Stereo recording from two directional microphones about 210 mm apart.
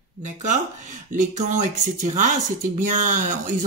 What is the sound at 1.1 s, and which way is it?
Speech, 35° right (ahead or behind).